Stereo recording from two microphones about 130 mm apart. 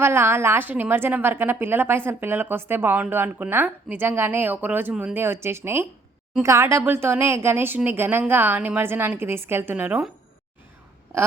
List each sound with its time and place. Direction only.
0.0 s a woman's voice: 20° right (ahead or behind)